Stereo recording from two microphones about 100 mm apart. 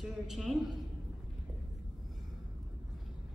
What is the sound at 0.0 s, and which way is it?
Speech, 5° right (ahead or behind).